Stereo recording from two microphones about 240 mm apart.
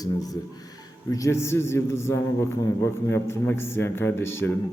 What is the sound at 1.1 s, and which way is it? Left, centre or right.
A man's voice, centre.